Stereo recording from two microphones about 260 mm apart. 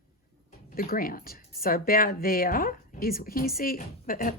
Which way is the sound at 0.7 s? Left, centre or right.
Left.